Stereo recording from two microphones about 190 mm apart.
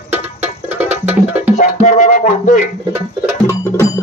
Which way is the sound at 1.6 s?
40° left (ahead or behind).